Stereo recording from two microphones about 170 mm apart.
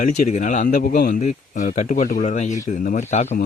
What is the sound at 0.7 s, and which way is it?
Speech, 60° left (ahead or behind).